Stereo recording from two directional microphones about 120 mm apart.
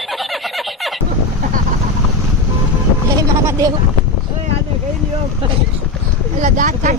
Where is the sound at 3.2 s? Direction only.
30° right (ahead or behind).